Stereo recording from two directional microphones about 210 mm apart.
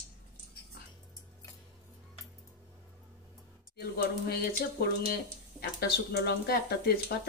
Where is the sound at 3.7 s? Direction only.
50° left (ahead or behind).